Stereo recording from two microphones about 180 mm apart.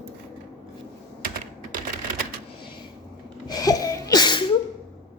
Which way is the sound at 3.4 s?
20° left (ahead or behind).